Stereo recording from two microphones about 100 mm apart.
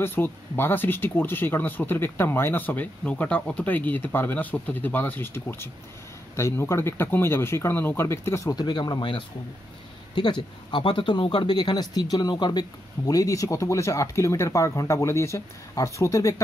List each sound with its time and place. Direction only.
0.0 s speech: 20° left (ahead or behind)
8.5 s speech: 45° left (ahead or behind)